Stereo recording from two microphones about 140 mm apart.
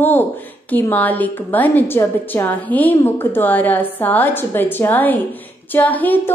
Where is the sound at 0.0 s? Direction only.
15° left (ahead or behind).